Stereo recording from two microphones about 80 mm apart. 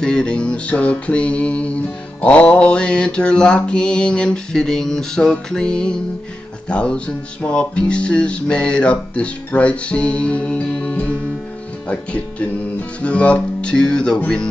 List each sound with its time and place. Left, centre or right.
0.0 s mantra: centre